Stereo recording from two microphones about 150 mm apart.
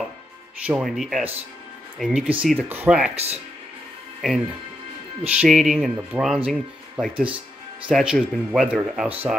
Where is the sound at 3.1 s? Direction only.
45° right (ahead or behind).